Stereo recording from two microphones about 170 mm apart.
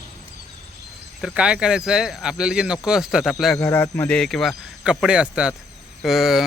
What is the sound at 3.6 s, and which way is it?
Speech, 15° left (ahead or behind).